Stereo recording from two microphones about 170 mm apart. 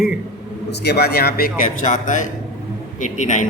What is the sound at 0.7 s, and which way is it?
A man's voice, 75° left (ahead or behind).